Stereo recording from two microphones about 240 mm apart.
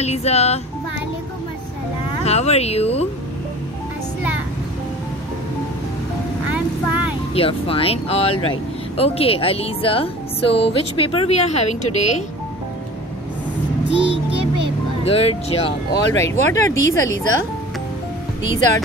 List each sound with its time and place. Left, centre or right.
0.0 s a woman's voice: left
2.2 s a woman's voice: left
7.3 s a woman's voice: left
13.8 s child singing: right
15.0 s a woman's voice: left
16.2 s speech: centre